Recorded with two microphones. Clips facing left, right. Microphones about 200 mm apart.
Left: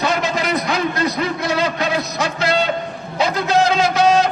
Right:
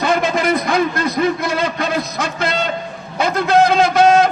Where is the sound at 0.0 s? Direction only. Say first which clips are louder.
Right 3 dB; 55° right (ahead or behind).